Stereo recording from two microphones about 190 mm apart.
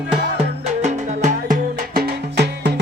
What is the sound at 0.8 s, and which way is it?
Music, 40° right (ahead or behind).